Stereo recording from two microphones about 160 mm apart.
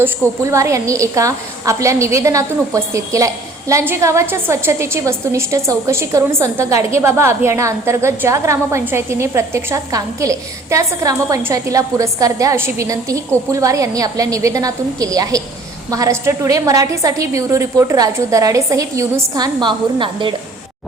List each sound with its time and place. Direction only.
0.0 s a woman's voice: 20° right (ahead or behind)